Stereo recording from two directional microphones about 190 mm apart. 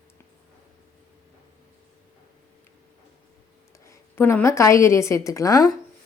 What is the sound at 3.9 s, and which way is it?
Speech, 10° left (ahead or behind).